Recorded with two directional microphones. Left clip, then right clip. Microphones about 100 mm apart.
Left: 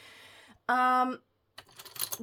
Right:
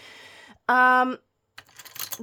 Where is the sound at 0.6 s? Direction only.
90° right.